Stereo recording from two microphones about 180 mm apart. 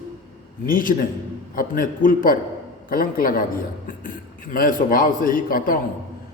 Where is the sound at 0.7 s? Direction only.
50° left (ahead or behind).